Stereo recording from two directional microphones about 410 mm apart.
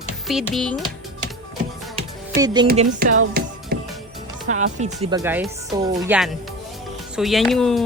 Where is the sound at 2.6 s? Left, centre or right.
Centre.